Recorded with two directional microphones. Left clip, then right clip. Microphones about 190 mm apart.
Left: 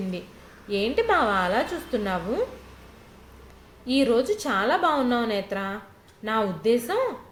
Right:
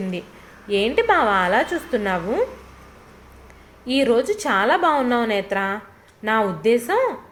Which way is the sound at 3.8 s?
25° right (ahead or behind).